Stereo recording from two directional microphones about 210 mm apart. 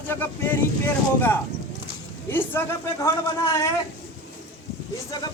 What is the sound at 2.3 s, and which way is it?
Speech, 10° left (ahead or behind).